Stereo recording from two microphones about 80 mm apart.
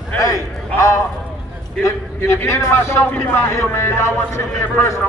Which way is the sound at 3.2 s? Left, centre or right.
Left.